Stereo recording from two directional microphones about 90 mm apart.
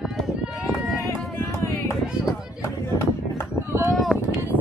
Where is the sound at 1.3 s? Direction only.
30° left (ahead or behind).